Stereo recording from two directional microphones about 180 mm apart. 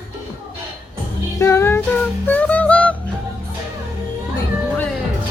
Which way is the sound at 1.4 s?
15° left (ahead or behind).